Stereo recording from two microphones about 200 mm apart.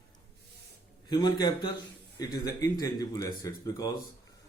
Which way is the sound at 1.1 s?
20° left (ahead or behind).